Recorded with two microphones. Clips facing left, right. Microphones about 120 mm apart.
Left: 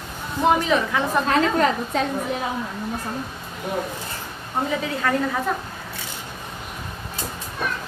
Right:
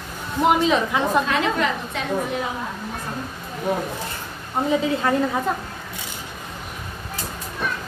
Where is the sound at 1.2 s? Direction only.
40° left (ahead or behind).